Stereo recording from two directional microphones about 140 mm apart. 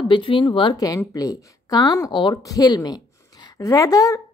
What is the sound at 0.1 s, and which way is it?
A woman's voice, 35° left (ahead or behind).